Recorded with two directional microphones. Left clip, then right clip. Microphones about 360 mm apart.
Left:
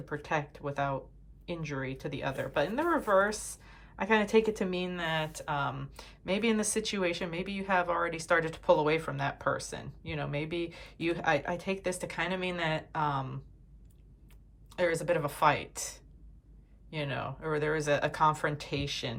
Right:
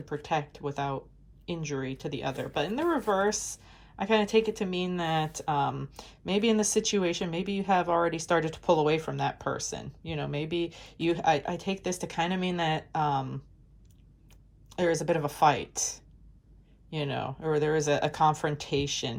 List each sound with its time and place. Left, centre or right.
0.0 s speech: centre
14.7 s speech: centre